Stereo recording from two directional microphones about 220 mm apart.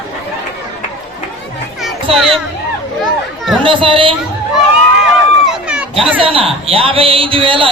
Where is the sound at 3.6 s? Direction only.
25° right (ahead or behind).